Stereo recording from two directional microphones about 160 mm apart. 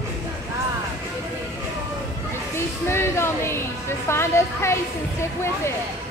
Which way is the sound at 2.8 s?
15° left (ahead or behind).